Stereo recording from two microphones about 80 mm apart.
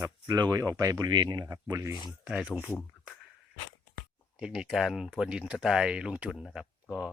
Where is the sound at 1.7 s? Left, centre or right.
Right.